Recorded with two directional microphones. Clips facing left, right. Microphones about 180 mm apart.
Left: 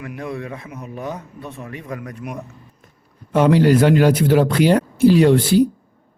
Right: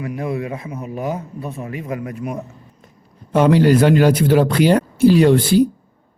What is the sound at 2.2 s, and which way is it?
Speech, 40° right (ahead or behind).